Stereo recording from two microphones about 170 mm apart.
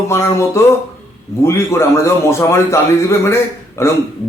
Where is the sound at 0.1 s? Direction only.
15° left (ahead or behind).